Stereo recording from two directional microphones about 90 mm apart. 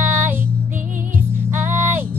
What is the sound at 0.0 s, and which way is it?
Music, 25° right (ahead or behind).